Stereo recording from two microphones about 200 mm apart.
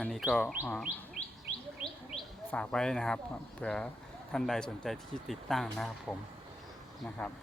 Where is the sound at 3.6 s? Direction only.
5° left (ahead or behind).